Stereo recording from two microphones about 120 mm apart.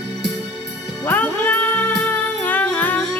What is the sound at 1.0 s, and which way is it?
Music, 15° left (ahead or behind).